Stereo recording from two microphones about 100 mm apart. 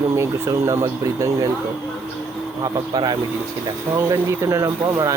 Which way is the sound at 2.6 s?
45° right (ahead or behind).